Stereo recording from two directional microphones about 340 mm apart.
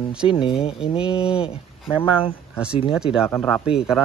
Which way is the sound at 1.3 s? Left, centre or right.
Centre.